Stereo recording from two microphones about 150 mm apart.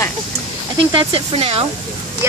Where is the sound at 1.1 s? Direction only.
40° right (ahead or behind).